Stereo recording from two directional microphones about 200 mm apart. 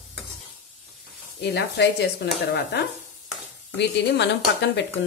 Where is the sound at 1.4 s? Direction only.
55° left (ahead or behind).